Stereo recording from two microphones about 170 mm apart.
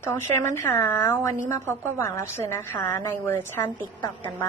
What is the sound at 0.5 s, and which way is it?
A woman's voice, 15° left (ahead or behind).